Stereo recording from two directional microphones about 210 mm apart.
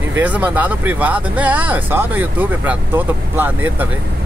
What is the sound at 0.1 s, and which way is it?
Speech, 10° right (ahead or behind).